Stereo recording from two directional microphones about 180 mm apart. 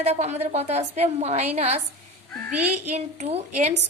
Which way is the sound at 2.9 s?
35° right (ahead or behind).